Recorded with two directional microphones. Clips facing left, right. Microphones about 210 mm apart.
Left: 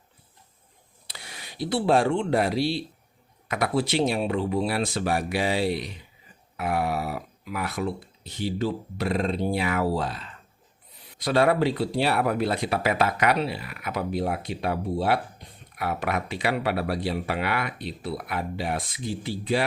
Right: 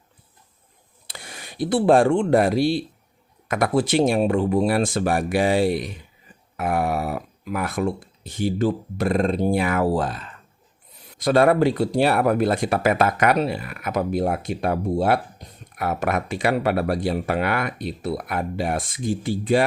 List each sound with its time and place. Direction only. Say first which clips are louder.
1.0 s speech: right 4 dB; 50° right (ahead or behind)